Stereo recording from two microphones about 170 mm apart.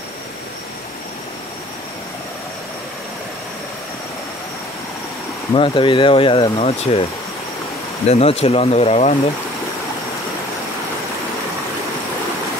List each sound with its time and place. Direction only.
5.5 s speech: 30° left (ahead or behind)
8.1 s speech: 35° left (ahead or behind)